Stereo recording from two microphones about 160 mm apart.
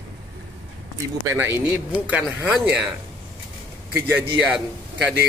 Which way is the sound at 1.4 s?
15° right (ahead or behind).